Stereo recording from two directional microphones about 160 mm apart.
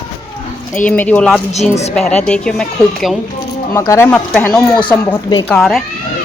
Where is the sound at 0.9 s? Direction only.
10° left (ahead or behind).